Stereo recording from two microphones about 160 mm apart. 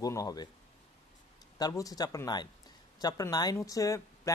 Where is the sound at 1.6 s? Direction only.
20° left (ahead or behind).